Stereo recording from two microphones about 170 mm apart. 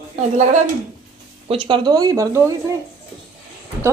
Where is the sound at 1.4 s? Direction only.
30° right (ahead or behind).